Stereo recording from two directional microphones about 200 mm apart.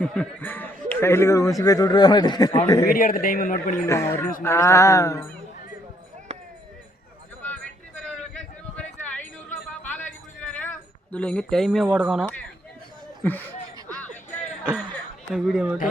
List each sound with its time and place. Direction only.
0.0 s a man's voice: 5° left (ahead or behind); by 2.6 s 20° left (ahead or behind)
2.6 s music: 15° left (ahead or behind)
2.9 s a man's voice: 45° left (ahead or behind)
3.8 s music: 15° left (ahead or behind)
8.0 s a sound: 5° left (ahead or behind)
13.8 s a sound: 10° left (ahead or behind)
15.3 s speech: centre (ahead or behind)